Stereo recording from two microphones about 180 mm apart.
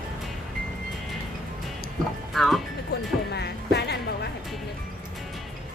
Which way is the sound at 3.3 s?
65° left (ahead or behind).